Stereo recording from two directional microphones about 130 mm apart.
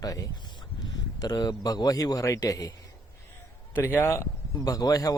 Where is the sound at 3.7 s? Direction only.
15° left (ahead or behind).